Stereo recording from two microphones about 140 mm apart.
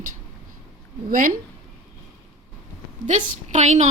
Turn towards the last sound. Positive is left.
turn(degrees=-55)  # may be behind; listen again after turning